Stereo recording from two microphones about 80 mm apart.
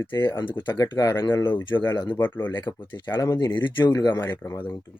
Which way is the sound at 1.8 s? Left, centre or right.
Left.